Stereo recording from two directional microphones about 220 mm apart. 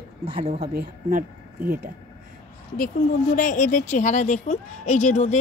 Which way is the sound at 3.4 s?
35° left (ahead or behind).